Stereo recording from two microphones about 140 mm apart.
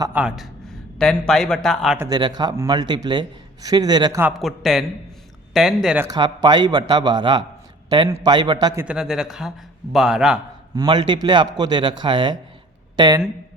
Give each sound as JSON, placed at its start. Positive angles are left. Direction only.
{"t": 0.1, "sound": "a man's voice", "side_deg": -10}
{"t": 2.0, "sound": "a man's voice", "side_deg": -30}
{"t": 4.4, "sound": "speech", "side_deg": 0}
{"t": 6.1, "sound": "a man's voice", "side_deg": -30}
{"t": 8.8, "sound": "speech", "side_deg": -5}
{"t": 10.8, "sound": "a man's voice", "side_deg": -35}